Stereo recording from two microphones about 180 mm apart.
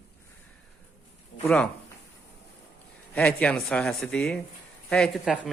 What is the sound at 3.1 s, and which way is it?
Speech, 5° left (ahead or behind).